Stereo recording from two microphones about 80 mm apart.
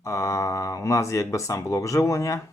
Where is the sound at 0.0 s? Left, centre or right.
Left.